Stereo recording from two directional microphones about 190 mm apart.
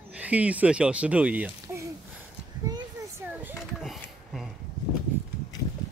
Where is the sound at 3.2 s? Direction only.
5° right (ahead or behind).